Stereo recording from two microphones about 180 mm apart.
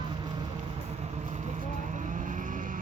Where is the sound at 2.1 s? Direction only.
45° right (ahead or behind).